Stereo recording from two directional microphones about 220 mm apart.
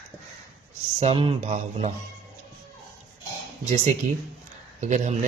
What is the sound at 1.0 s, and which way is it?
Speech, 25° right (ahead or behind).